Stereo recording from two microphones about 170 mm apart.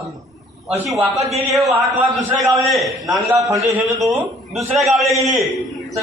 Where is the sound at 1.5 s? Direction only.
20° right (ahead or behind).